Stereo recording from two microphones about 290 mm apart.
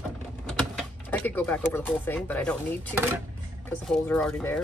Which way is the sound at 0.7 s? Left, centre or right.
Centre.